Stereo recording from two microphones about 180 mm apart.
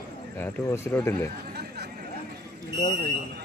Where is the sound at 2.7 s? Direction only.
20° left (ahead or behind).